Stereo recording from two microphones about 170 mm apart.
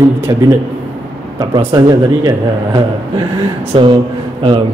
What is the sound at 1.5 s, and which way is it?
Speech, 25° right (ahead or behind).